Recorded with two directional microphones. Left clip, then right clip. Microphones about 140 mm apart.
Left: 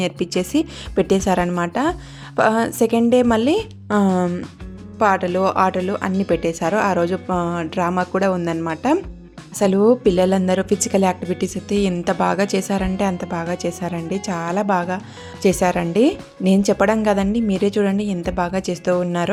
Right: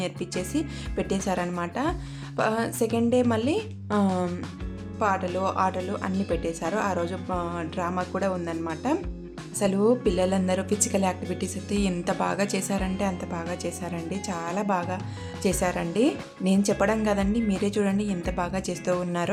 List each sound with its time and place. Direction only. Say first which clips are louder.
0.0 s speech: left 9 dB; 50° left (ahead or behind); by 18.9 s 35° left (ahead or behind)